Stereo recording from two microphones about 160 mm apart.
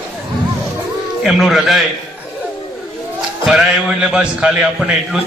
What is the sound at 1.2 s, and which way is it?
Speech, centre (ahead or behind).